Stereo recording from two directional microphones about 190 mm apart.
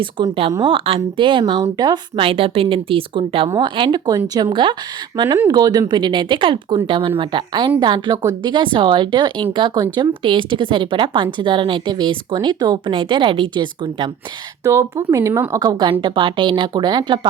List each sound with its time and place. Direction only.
0.0 s a woman's voice: 30° right (ahead or behind)